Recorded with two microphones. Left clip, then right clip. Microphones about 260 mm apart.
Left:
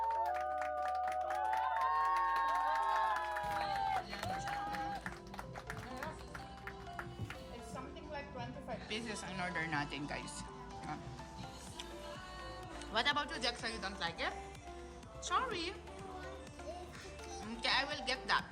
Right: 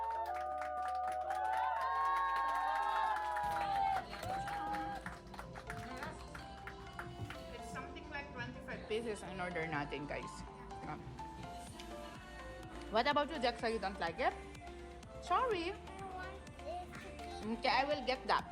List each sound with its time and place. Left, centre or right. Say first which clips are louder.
0.0 s crowd: left 3 dB; centre
5.9 s music: left 3 dB; centre
7.8 s music: left 1 dB; centre
12.9 s speech: right 2 dB; centre
17.6 s speech: right 1 dB; centre